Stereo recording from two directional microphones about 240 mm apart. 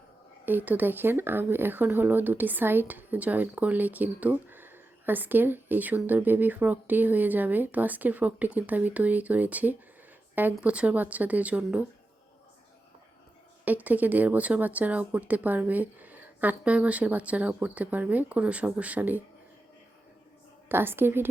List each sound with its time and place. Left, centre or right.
0.4 s speech: centre
13.7 s speech: centre
20.7 s speech: centre